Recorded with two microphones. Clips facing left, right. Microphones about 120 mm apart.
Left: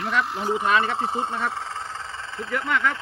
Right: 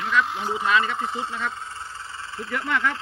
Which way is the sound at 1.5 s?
90° left.